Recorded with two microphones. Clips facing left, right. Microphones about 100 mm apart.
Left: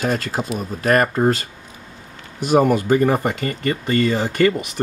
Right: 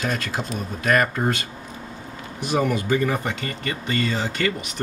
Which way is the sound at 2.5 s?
45° left (ahead or behind).